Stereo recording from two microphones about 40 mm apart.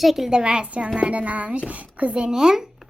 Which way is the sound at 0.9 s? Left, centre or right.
Right.